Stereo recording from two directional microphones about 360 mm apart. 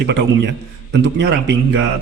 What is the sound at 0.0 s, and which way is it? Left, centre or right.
A man's voice, right.